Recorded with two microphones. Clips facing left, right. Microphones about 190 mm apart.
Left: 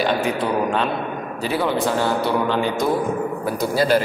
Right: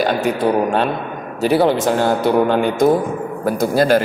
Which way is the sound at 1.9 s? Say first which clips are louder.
Right 5 dB; 45° right (ahead or behind).